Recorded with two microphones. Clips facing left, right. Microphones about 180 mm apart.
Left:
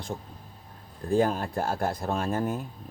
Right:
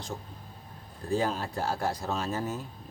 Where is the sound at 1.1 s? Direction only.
50° left (ahead or behind).